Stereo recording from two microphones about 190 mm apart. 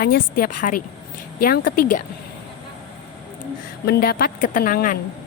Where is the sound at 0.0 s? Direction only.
50° left (ahead or behind).